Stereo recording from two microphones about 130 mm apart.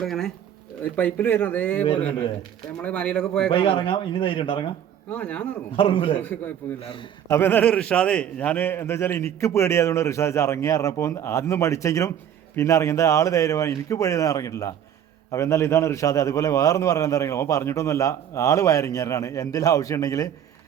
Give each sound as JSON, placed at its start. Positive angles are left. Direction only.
{"t": 0.0, "sound": "speech", "side_deg": 5}
{"t": 2.8, "sound": "speech", "side_deg": 10}
{"t": 3.5, "sound": "speech", "side_deg": 40}
{"t": 5.1, "sound": "speech", "side_deg": 10}
{"t": 5.7, "sound": "a man's voice", "side_deg": 45}
{"t": 6.2, "sound": "a man's voice", "side_deg": 10}